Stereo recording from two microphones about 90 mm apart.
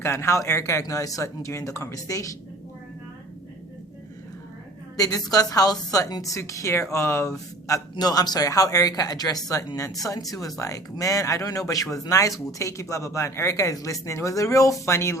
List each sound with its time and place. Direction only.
0.0 s speech: 30° left (ahead or behind)
4.9 s speech: 45° left (ahead or behind)
7.9 s speech: 45° left (ahead or behind); by 15.2 s 30° left (ahead or behind)